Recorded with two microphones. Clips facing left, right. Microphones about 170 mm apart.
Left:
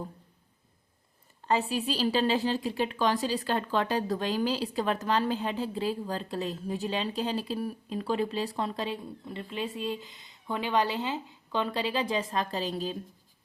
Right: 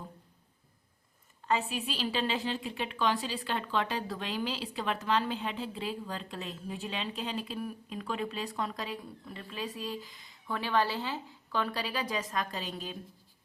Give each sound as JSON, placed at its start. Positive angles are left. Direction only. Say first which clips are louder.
{"t": 1.5, "sound": "a woman's voice", "louder": "left 4 dB", "side_deg": 35}